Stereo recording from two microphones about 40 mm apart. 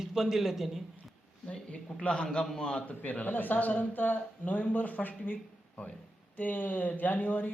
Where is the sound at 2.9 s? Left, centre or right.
Left.